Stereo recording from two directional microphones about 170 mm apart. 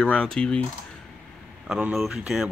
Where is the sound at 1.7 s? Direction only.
Centre (ahead or behind).